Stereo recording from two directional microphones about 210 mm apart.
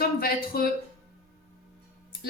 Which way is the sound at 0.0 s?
45° left (ahead or behind).